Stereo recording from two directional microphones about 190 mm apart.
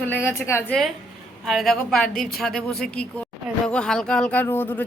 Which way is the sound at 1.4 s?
Centre (ahead or behind).